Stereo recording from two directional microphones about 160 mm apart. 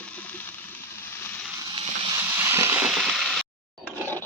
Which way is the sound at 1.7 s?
25° right (ahead or behind).